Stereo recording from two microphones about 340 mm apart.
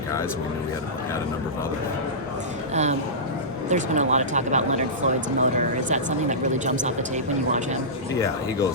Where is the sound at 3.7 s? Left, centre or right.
Right.